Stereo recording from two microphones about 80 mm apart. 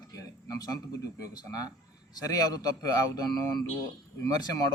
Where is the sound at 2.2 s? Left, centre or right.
Left.